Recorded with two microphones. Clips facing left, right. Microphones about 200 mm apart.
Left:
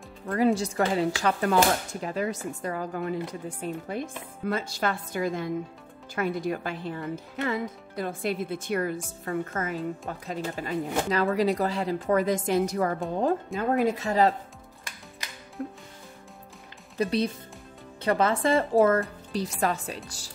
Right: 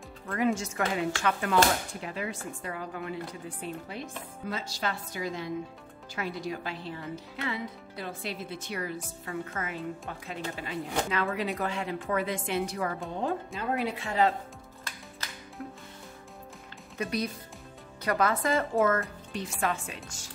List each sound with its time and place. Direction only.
0.3 s speech: 35° left (ahead or behind)
15.6 s music: 35° left (ahead or behind)
16.9 s speech: 30° left (ahead or behind)